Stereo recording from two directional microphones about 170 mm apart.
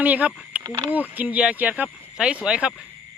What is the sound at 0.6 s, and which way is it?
Speech, 20° right (ahead or behind).